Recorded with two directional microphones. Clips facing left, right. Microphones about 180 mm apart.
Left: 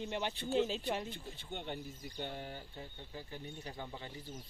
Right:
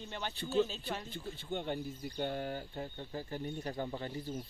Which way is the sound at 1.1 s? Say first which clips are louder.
Right 6 dB; 35° right (ahead or behind).